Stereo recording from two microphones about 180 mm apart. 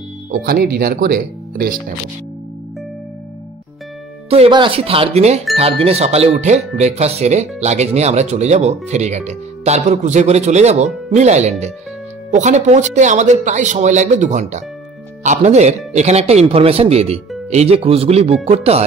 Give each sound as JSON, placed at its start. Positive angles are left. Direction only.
{"t": 0.3, "sound": "speech", "side_deg": -55}
{"t": 4.3, "sound": "speech", "side_deg": -30}